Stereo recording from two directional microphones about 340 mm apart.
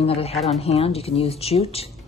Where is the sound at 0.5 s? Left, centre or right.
Centre.